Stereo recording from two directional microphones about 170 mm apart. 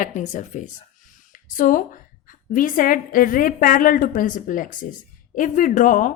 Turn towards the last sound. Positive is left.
turn(degrees=50)  # may be behind; listen again after turning